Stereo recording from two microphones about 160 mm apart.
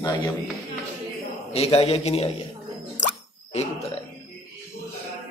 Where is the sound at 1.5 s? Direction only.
40° left (ahead or behind).